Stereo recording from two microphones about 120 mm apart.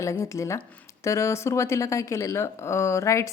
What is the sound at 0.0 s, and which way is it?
Speech, 25° left (ahead or behind).